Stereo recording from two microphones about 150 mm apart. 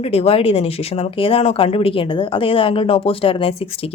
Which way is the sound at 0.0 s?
40° left (ahead or behind).